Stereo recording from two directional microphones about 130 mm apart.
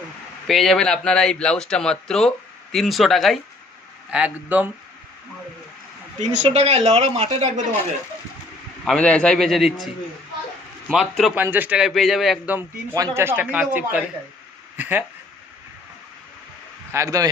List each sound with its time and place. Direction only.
0.4 s speech: centre (ahead or behind)
4.1 s speech: 10° right (ahead or behind)
6.1 s speech: 60° right (ahead or behind)
8.8 s speech: 5° left (ahead or behind)
10.8 s speech: 5° left (ahead or behind)
11.4 s speech: 15° right (ahead or behind)
11.9 s speech: centre (ahead or behind)
12.9 s speech: 20° right (ahead or behind)
16.9 s speech: 25° right (ahead or behind)